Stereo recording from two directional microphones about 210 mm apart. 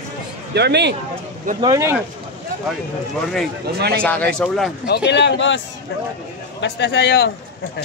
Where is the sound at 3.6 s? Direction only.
50° right (ahead or behind).